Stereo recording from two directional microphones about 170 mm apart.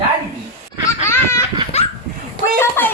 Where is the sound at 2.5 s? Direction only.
15° left (ahead or behind).